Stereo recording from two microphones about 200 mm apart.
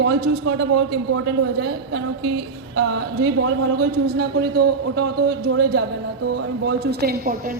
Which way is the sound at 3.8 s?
50° right (ahead or behind).